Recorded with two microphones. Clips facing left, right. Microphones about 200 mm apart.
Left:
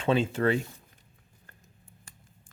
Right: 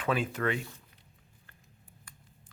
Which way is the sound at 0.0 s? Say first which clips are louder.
Left 5 dB; 25° left (ahead or behind).